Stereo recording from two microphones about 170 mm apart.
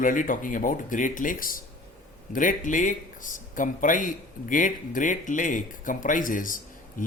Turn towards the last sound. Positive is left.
turn(degrees=55)  # may be behind; listen again after turning